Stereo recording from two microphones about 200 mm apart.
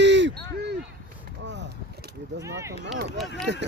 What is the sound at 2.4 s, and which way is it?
Speech, 15° right (ahead or behind).